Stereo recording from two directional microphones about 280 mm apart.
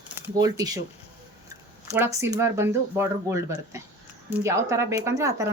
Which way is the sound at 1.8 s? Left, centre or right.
Centre.